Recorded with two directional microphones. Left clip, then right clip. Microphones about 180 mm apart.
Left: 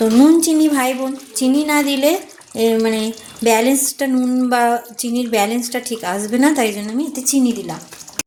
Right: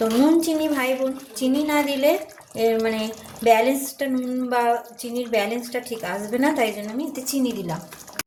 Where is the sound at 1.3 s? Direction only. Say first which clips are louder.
Left 6 dB; 50° left (ahead or behind).